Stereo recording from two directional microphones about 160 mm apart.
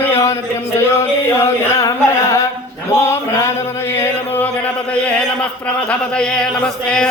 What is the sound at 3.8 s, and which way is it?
Speech, 15° left (ahead or behind).